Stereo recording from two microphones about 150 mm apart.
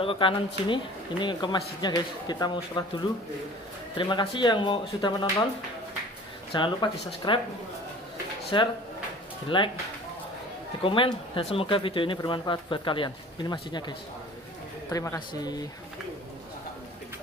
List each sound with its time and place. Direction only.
0.0 s speech: 35° left (ahead or behind)
6.5 s speech: 35° left (ahead or behind)
8.5 s speech: 30° left (ahead or behind)
10.8 s speech: 35° left (ahead or behind)